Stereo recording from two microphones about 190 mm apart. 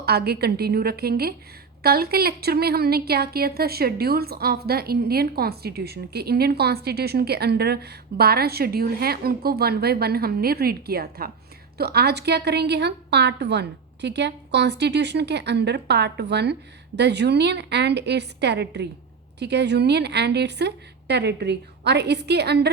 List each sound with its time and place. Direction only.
0.0 s a woman's voice: 55° right (ahead or behind)